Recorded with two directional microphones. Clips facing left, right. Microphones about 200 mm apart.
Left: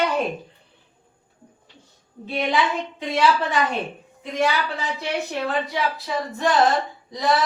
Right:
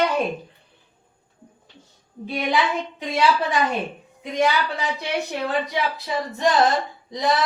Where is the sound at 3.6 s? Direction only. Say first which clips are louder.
Right 1 dB; 15° right (ahead or behind).